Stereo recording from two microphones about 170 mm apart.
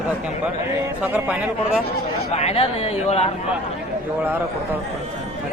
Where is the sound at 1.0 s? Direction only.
5° right (ahead or behind).